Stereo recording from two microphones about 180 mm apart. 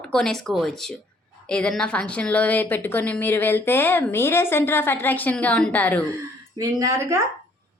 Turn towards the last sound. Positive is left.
turn(degrees=-15)  # may be behind; listen again after turning